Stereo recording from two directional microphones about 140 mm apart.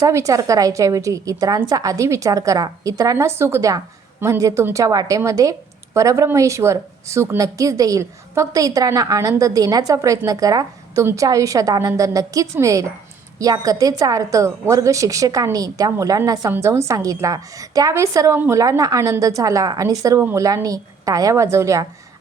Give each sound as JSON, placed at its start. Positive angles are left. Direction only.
{"t": 0.0, "sound": "speech", "side_deg": -25}